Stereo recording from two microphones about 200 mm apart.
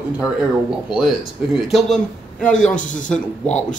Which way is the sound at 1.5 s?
Centre (ahead or behind).